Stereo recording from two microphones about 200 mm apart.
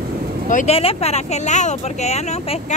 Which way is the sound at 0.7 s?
30° left (ahead or behind).